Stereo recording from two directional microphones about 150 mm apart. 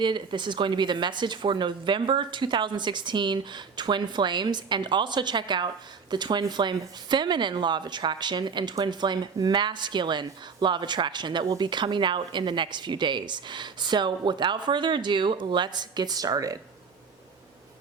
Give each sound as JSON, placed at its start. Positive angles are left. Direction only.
{"t": 0.0, "sound": "speech", "side_deg": -30}